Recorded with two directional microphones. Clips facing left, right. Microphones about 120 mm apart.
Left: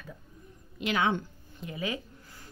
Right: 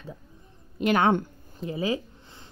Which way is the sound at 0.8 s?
50° right (ahead or behind).